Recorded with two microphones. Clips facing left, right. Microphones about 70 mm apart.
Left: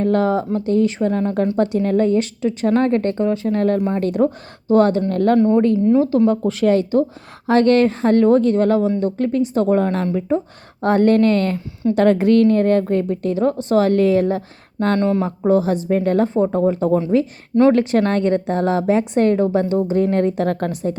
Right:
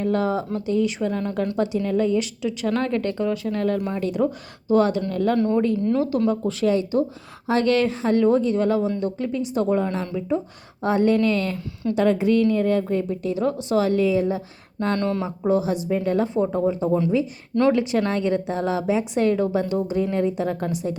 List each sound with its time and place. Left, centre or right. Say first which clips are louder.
0.0 s a woman's voice: left 5 dB; left
4.0 s a woman's voice: left 5 dB; left
5.4 s a woman's voice: left 6 dB; left
6.1 s a woman's voice: left 6 dB; left
6.7 s a woman's voice: left 5 dB; left
10.2 s a woman's voice: left 2 dB; left
10.8 s a woman's voice: left 5 dB; left
11.5 s a woman's voice: left 6 dB; left
11.9 s a woman's voice: left 5 dB; left
14.9 s a woman's voice: left 6 dB; left
15.2 s a woman's voice: left 5 dB; left